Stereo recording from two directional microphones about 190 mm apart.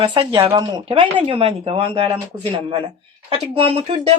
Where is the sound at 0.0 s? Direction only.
25° right (ahead or behind).